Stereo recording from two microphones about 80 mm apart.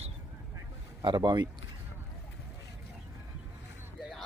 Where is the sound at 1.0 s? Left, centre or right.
Right.